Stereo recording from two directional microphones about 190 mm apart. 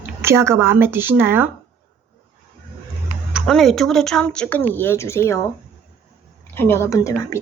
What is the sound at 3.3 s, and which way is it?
Speech, centre (ahead or behind).